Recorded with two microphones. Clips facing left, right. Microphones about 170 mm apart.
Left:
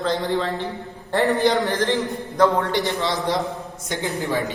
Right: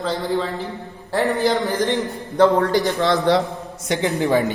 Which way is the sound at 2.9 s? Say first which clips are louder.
Right 6 dB; 60° right (ahead or behind).